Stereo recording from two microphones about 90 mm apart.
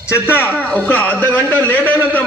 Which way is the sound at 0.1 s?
25° left (ahead or behind).